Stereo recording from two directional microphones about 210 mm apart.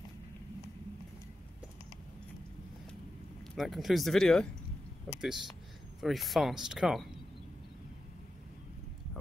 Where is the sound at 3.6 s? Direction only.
Centre (ahead or behind).